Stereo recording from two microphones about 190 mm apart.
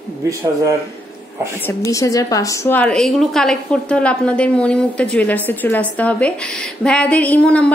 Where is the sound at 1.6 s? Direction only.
15° left (ahead or behind).